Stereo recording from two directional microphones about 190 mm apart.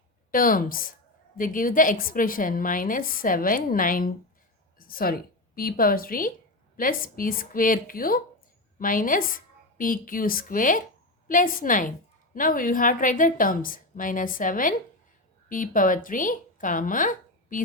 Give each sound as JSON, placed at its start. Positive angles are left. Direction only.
{"t": 0.3, "sound": "a woman's voice", "side_deg": 45}